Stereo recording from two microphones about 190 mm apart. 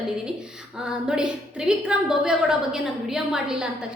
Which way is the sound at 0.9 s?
5° right (ahead or behind).